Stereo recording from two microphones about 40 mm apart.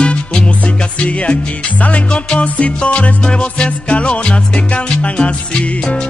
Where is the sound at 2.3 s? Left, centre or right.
Left.